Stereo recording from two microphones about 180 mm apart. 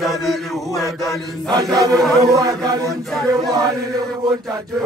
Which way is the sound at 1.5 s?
20° right (ahead or behind).